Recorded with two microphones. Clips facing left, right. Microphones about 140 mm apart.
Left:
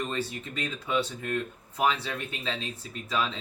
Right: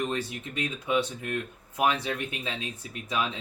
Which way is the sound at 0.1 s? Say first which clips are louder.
Right 1 dB; 15° right (ahead or behind).